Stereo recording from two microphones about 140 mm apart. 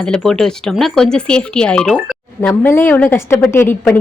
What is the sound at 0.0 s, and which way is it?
Speech, 5° left (ahead or behind).